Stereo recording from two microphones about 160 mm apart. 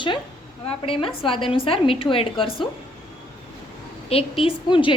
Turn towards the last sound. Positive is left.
turn(degrees=30)  # may be behind; listen again after turning